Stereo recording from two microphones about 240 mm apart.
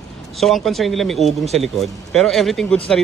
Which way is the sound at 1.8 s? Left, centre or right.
Centre.